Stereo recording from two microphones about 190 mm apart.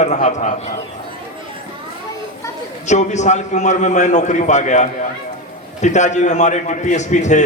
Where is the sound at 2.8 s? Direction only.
40° left (ahead or behind).